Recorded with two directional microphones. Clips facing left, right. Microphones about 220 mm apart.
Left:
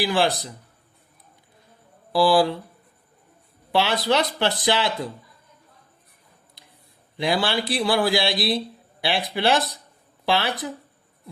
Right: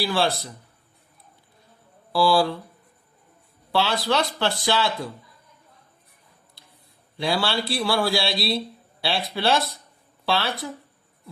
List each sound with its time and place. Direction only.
0.0 s speech: 15° left (ahead or behind)
2.1 s speech: 20° left (ahead or behind)
3.7 s speech: 20° left (ahead or behind)
7.2 s speech: 20° left (ahead or behind)